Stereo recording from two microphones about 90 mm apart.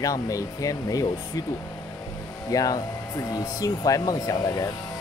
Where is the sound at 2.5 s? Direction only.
40° left (ahead or behind).